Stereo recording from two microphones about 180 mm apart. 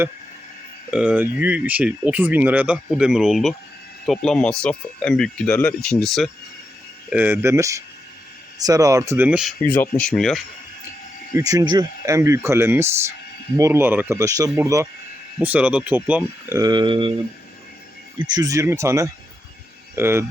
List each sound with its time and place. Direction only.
0.9 s speech: 5° right (ahead or behind)
7.1 s speech: 10° right (ahead or behind)
9.6 s speech: 10° left (ahead or behind)
11.3 s speech: 20° right (ahead or behind)
18.2 s speech: 20° right (ahead or behind)